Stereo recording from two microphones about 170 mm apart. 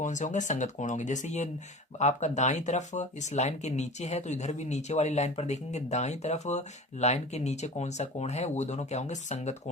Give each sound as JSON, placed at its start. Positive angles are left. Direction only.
{"t": 0.0, "sound": "speech", "side_deg": 45}